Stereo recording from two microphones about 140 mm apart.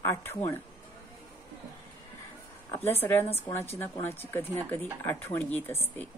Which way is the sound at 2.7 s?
15° left (ahead or behind).